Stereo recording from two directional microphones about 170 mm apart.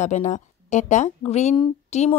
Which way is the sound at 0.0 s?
45° left (ahead or behind).